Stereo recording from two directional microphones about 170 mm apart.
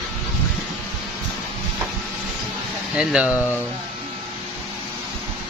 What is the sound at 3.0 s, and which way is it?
Speech, 5° right (ahead or behind).